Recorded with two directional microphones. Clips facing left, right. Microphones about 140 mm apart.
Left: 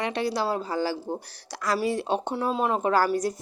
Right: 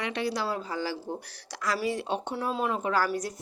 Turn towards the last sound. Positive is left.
turn(degrees=35)  # may be behind; listen again after turning